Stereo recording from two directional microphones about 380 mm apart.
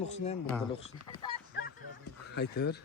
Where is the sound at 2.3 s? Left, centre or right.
Left.